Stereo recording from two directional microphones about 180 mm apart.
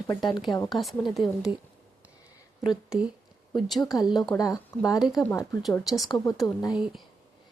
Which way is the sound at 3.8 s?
20° left (ahead or behind).